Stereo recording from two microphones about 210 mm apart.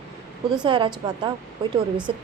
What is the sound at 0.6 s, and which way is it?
A woman's voice, 25° right (ahead or behind).